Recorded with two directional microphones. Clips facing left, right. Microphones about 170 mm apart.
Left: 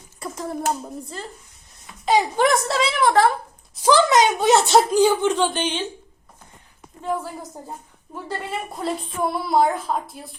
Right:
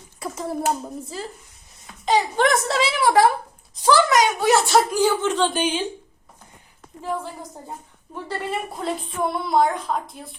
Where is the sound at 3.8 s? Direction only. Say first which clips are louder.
Left 1 dB; 20° left (ahead or behind).